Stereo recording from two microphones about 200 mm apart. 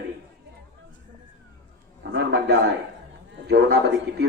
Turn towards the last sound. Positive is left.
turn(degrees=-55)  # may be behind; listen again after turning